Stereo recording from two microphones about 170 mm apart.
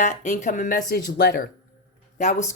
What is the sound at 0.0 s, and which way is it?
Speech, 45° left (ahead or behind).